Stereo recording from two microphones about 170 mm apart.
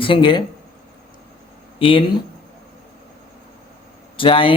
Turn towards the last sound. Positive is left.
turn(degrees=30)  # may be behind; listen again after turning